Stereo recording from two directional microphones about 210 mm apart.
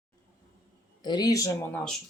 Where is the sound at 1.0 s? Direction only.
20° left (ahead or behind).